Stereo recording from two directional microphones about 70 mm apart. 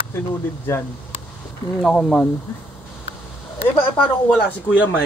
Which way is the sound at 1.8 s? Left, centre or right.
Centre.